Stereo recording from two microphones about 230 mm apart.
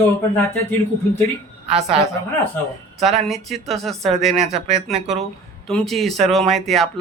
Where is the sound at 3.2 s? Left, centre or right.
Centre.